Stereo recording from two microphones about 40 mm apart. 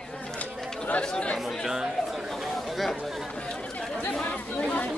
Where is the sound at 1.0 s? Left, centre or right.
Left.